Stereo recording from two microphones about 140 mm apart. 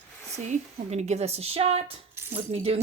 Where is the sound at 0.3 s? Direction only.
55° right (ahead or behind).